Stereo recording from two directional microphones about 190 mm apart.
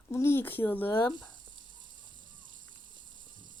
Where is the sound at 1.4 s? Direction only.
25° right (ahead or behind).